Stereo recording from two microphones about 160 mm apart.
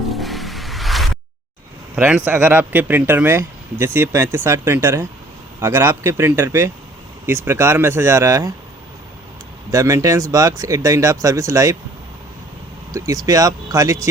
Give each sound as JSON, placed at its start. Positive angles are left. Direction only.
{"t": 0.1, "sound": "music", "side_deg": 0}
{"t": 2.0, "sound": "speech", "side_deg": -10}
{"t": 9.7, "sound": "speech", "side_deg": -20}
{"t": 12.9, "sound": "speech", "side_deg": -20}